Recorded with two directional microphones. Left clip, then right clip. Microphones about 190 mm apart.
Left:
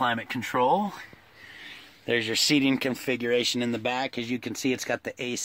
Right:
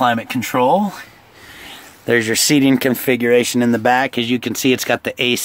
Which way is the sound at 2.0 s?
20° right (ahead or behind).